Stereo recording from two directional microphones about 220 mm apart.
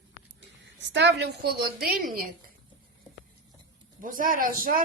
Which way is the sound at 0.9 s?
50° right (ahead or behind).